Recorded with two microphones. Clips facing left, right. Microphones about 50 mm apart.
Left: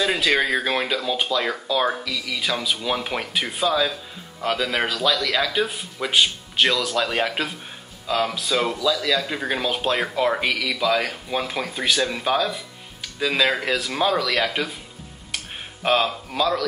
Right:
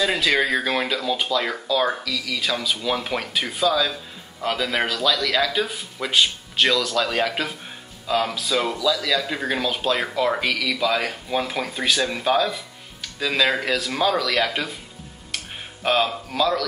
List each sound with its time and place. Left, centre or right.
0.0 s speech: centre
2.0 s speech: left
2.4 s speech: centre
4.4 s speech: centre
8.1 s speech: centre
10.7 s speech: centre
15.3 s a sound: centre